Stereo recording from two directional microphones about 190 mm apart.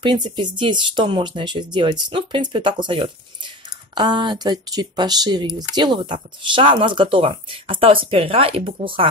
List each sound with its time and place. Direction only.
0.0 s speech: 25° right (ahead or behind)